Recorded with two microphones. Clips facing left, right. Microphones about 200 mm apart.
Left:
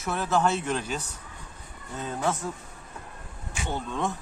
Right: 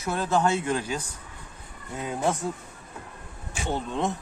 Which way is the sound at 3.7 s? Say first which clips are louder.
Right 2 dB; 20° right (ahead or behind).